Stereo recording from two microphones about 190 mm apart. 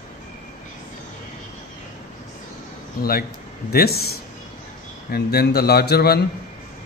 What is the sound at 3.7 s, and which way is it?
Speech, 55° left (ahead or behind).